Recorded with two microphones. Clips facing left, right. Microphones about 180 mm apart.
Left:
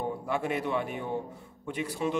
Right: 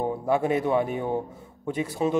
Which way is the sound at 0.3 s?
40° right (ahead or behind).